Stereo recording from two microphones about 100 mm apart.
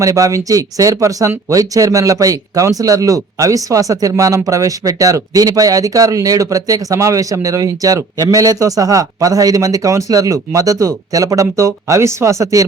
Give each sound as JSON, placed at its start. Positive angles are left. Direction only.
{"t": 0.0, "sound": "speech", "side_deg": -35}